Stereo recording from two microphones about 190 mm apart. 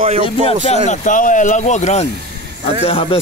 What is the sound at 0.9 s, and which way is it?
Speech, 40° left (ahead or behind).